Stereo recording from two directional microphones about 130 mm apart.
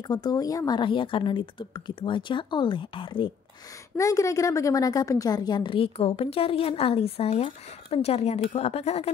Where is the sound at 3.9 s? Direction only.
25° left (ahead or behind).